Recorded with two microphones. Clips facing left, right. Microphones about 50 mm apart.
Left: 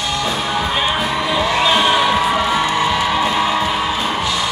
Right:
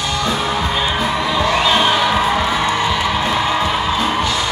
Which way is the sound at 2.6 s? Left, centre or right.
Centre.